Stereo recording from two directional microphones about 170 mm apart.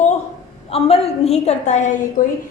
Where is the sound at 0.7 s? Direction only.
35° left (ahead or behind).